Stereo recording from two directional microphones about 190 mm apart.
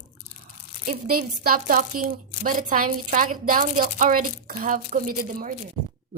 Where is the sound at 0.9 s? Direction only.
50° right (ahead or behind).